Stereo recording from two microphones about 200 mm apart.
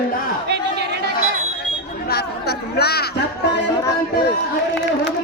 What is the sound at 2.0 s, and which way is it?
Music, 55° left (ahead or behind).